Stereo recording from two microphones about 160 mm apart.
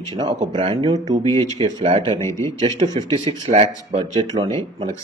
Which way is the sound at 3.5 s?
45° right (ahead or behind).